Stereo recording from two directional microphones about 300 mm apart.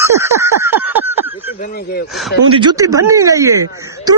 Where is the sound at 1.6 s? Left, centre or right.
Left.